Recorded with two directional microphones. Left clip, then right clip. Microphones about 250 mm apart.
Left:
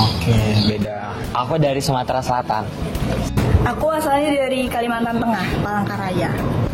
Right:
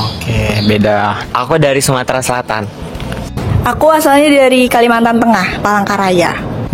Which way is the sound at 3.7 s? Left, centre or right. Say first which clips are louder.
Right 11 dB; right.